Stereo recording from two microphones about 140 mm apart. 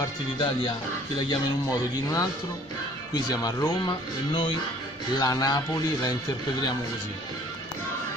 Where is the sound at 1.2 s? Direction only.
25° left (ahead or behind).